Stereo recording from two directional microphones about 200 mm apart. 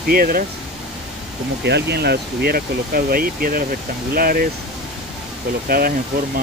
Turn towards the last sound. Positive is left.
turn(degrees=-50)  # may be behind; listen again after turning